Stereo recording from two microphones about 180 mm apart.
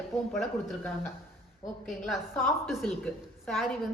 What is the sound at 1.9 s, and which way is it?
A woman's voice, centre (ahead or behind).